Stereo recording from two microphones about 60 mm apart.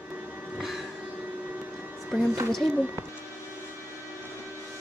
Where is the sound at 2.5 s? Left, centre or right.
Centre.